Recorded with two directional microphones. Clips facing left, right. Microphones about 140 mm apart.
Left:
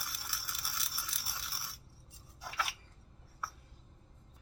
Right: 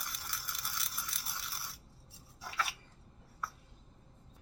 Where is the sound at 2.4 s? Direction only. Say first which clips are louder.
Right 1 dB; centre (ahead or behind).